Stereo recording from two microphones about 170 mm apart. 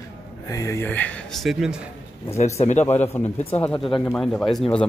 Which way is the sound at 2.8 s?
15° left (ahead or behind).